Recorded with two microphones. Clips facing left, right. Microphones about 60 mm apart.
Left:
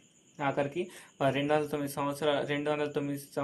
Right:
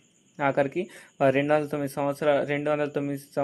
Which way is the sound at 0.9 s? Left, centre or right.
Right.